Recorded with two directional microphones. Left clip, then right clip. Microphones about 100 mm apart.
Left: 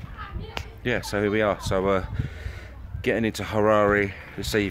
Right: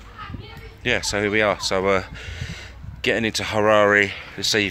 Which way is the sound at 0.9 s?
20° left (ahead or behind).